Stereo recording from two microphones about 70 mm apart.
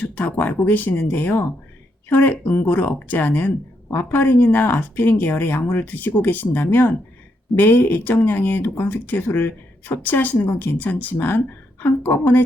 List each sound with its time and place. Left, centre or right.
0.0 s speech: left